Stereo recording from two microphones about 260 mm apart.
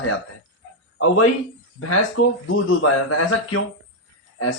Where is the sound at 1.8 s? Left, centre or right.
Left.